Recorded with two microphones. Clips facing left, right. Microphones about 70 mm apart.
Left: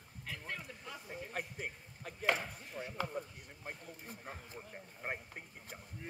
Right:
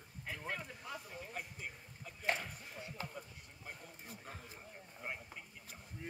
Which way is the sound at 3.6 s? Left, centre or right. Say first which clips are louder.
Left 4 dB; left.